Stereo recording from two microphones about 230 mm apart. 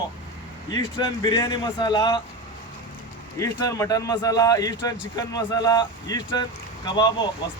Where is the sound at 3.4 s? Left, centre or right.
Centre.